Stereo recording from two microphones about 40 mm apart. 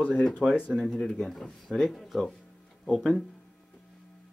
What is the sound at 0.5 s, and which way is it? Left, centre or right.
Speech, right.